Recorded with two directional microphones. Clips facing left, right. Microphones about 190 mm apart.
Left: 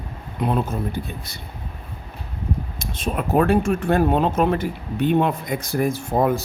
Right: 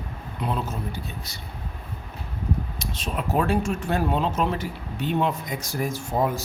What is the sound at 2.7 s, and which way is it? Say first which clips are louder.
Speech: left 4 dB; 50° left (ahead or behind).